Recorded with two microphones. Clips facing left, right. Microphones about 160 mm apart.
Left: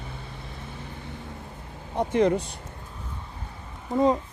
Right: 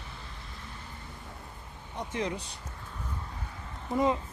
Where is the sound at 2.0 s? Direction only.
60° left (ahead or behind).